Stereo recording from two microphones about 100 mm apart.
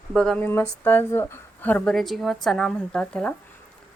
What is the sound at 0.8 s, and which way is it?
Speech, 20° left (ahead or behind).